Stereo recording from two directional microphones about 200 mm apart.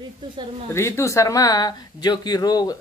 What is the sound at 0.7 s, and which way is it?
Speech, 15° left (ahead or behind).